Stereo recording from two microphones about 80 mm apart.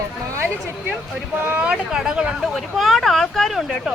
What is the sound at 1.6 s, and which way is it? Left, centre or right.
Speech, centre.